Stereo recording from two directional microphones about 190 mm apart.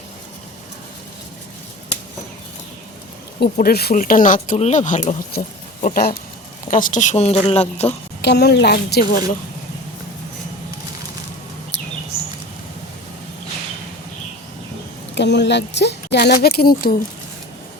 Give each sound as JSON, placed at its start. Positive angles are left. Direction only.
{"t": 3.4, "sound": "speech", "side_deg": 55}
{"t": 8.2, "sound": "a woman's voice", "side_deg": 60}
{"t": 11.7, "sound": "a sound", "side_deg": 65}
{"t": 15.1, "sound": "speech", "side_deg": 65}